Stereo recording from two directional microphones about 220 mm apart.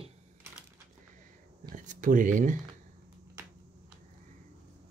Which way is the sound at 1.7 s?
35° right (ahead or behind).